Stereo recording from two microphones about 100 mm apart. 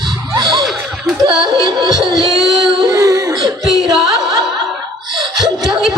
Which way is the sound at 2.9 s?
30° right (ahead or behind).